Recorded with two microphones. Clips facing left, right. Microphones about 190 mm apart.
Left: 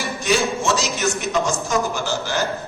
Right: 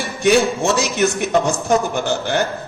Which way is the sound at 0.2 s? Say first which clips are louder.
Right 7 dB; 60° right (ahead or behind).